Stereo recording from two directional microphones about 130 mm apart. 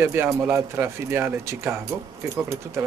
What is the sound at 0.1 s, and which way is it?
Speech, 20° right (ahead or behind).